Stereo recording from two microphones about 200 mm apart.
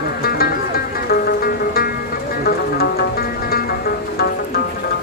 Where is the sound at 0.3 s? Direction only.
50° left (ahead or behind).